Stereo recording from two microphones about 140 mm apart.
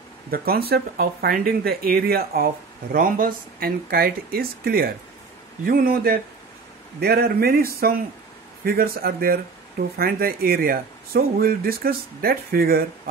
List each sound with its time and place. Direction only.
0.3 s speech: 90° right